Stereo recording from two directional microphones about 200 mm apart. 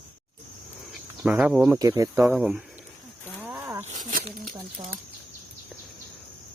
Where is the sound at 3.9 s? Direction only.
45° right (ahead or behind).